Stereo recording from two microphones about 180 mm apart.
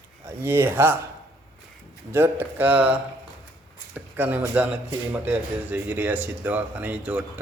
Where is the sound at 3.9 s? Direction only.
10° right (ahead or behind).